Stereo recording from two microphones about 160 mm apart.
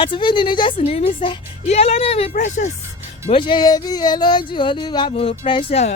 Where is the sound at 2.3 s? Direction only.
50° left (ahead or behind).